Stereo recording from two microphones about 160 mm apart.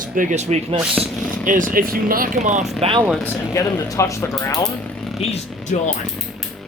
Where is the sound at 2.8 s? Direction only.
35° right (ahead or behind).